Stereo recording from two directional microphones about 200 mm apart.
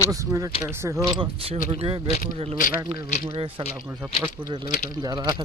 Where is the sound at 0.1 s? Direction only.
15° right (ahead or behind).